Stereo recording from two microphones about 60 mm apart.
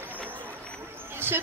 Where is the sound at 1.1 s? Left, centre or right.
Right.